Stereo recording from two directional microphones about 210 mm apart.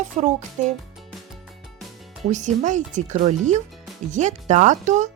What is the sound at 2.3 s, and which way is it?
Speech, 35° right (ahead or behind).